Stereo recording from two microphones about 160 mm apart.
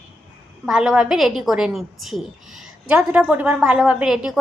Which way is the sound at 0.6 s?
5° right (ahead or behind).